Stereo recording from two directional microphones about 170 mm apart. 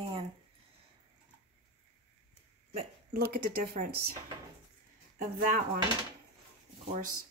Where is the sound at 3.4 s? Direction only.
60° right (ahead or behind).